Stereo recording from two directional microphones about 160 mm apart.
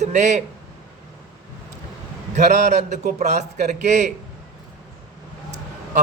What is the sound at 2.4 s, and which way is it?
A man's voice, 45° right (ahead or behind).